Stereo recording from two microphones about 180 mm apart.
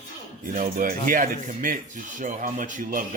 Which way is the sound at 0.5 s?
50° right (ahead or behind).